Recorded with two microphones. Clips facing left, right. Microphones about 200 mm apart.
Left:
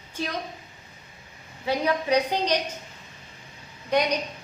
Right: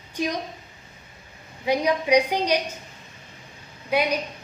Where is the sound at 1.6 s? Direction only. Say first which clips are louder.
Right 3 dB; 15° right (ahead or behind).